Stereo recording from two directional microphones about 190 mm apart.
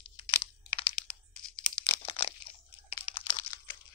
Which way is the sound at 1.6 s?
5° left (ahead or behind).